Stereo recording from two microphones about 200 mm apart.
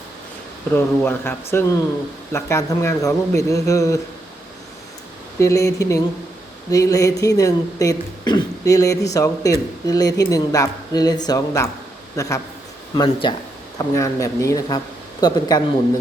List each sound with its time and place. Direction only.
0.7 s speech: 10° left (ahead or behind)
5.4 s a man's voice: 15° left (ahead or behind)